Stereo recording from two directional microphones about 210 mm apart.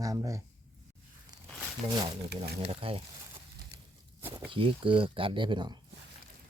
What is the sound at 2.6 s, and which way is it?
Speech, 25° right (ahead or behind).